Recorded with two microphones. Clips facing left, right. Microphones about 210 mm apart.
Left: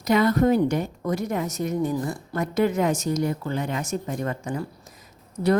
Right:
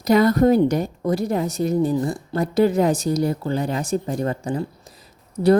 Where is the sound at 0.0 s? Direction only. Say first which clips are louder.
Right 4 dB; 40° right (ahead or behind).